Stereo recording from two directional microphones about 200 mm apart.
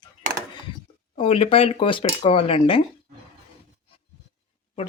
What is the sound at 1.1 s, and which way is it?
Speech, 30° left (ahead or behind).